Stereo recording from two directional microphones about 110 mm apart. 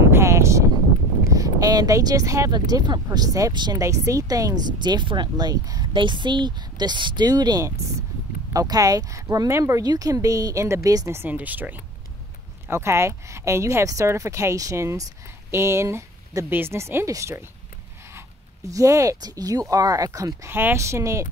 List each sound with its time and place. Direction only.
0.1 s a sound: 25° right (ahead or behind)
1.3 s speech: 30° right (ahead or behind)
3.8 s speech: 30° right (ahead or behind)
11.1 s speech: 15° right (ahead or behind)